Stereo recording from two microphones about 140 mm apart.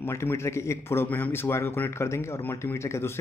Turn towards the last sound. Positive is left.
turn(degrees=20)  # may be behind; listen again after turning